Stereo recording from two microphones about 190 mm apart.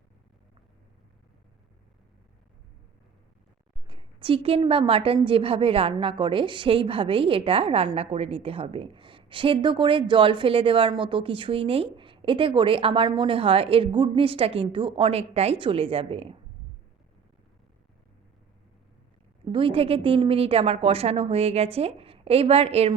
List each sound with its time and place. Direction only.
3.8 s a woman's voice: 25° right (ahead or behind)
19.5 s a woman's voice: 25° right (ahead or behind)